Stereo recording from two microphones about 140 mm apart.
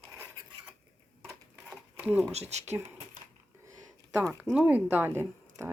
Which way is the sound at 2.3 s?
50° right (ahead or behind).